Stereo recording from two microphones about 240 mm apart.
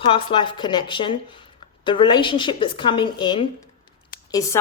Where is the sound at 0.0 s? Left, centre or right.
Left.